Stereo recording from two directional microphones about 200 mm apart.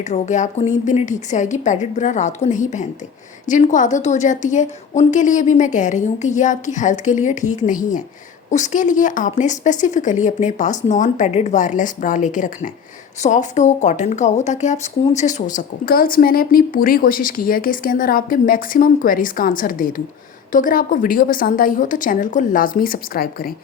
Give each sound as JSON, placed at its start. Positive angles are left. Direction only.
{"t": 0.0, "sound": "a woman's voice", "side_deg": 35}